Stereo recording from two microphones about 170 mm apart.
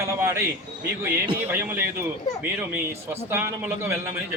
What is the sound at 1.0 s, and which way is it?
A man's voice, 10° right (ahead or behind).